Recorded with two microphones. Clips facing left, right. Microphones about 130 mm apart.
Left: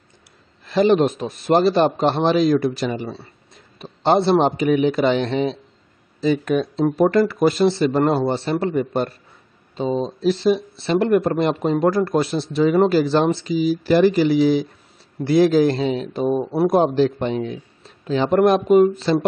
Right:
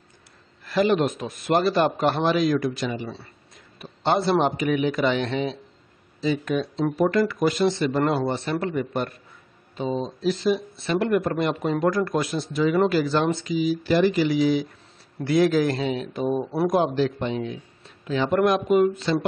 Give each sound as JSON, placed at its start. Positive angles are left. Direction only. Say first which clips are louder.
{"t": 0.7, "sound": "a man's voice", "louder": "left 5 dB", "side_deg": 30}
{"t": 6.2, "sound": "a man's voice", "louder": "left 5 dB", "side_deg": 50}